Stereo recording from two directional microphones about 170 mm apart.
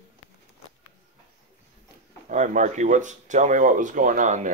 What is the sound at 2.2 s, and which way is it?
Speech, 45° right (ahead or behind).